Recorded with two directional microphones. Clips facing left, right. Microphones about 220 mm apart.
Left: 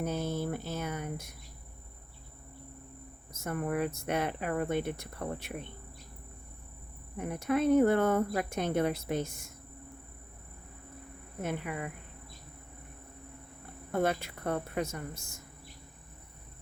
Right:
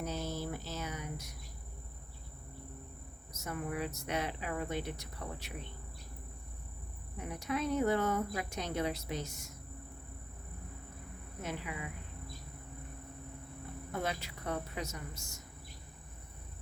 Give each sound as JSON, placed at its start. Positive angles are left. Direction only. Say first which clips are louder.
{"t": 0.0, "sound": "cricket", "louder": "left 5 dB", "side_deg": 55}
{"t": 3.3, "sound": "speech", "louder": "left 6 dB", "side_deg": 50}
{"t": 7.2, "sound": "speech", "louder": "left 7 dB", "side_deg": 55}
{"t": 11.4, "sound": "speech", "louder": "left 6 dB", "side_deg": 55}
{"t": 13.9, "sound": "speech", "louder": "left 8 dB", "side_deg": 55}